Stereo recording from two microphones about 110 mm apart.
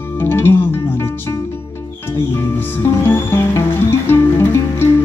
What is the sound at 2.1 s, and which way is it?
Music, 20° left (ahead or behind).